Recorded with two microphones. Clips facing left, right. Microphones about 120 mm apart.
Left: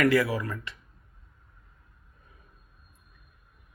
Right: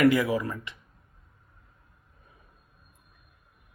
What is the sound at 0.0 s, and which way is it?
Speech, 20° right (ahead or behind).